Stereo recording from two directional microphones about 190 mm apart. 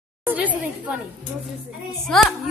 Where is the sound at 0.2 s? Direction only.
10° right (ahead or behind).